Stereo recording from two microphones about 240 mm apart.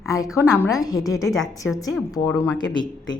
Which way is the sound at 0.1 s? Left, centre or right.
Centre.